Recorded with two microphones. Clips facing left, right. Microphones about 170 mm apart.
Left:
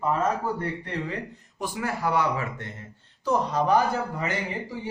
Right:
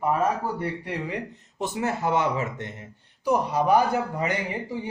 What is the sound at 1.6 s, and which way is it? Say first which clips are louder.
A man's voice: right 2 dB; 25° right (ahead or behind).